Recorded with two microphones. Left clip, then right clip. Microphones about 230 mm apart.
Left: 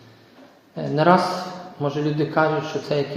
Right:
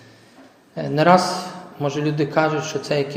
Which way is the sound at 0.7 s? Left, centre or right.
Right.